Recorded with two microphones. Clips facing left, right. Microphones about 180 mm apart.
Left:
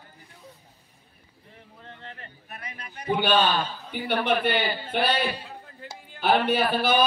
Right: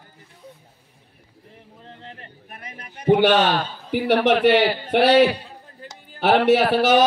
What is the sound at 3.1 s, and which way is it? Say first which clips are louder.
A man's voice: right 7 dB; 85° right.